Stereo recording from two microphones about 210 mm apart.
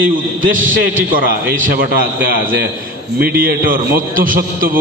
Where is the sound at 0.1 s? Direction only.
40° right (ahead or behind).